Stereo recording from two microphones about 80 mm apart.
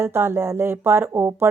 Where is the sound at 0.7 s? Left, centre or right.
Right.